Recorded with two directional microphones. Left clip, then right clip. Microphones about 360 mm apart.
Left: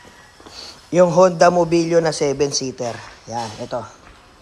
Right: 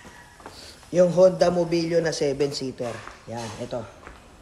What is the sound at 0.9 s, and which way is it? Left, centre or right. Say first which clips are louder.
A man's voice: left 4 dB; centre.